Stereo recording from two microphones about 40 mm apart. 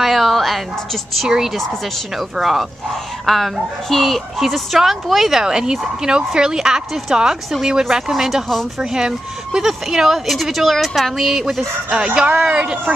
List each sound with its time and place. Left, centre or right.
0.0 s a sound: centre
1.2 s speech: centre
12.3 s speech: right